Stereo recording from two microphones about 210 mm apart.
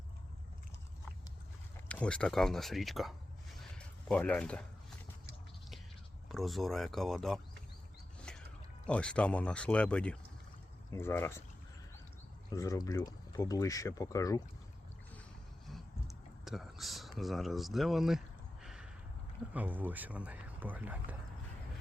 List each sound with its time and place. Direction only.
1.9 s speech: 5° left (ahead or behind)
3.6 s a sound: 5° left (ahead or behind)
6.2 s speech: centre (ahead or behind)
8.9 s speech: 5° left (ahead or behind)
12.5 s speech: 15° left (ahead or behind)
15.7 s a sound: centre (ahead or behind)
19.5 s speech: 10° right (ahead or behind)